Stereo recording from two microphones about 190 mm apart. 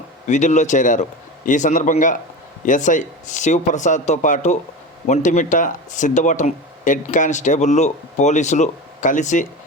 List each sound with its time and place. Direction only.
0.3 s speech: 40° left (ahead or behind)